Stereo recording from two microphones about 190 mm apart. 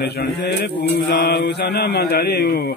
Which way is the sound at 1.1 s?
60° left (ahead or behind).